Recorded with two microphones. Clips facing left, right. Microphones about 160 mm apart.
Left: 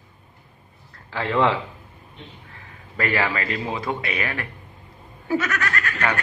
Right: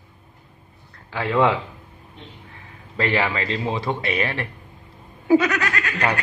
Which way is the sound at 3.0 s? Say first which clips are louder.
Right 1 dB; 20° right (ahead or behind).